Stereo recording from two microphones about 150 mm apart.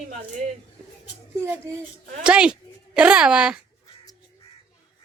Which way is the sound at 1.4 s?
15° right (ahead or behind).